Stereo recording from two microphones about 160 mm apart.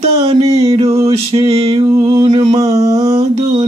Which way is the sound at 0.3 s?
40° right (ahead or behind).